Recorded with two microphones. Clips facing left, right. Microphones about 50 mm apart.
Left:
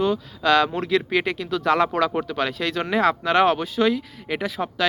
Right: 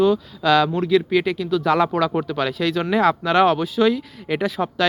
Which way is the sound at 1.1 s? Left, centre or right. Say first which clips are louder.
Right 3 dB; left.